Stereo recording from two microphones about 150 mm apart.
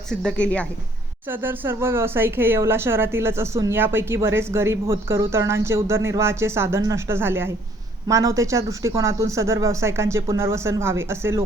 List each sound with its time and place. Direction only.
0.1 s speech: 5° left (ahead or behind)
1.3 s speech: 15° right (ahead or behind)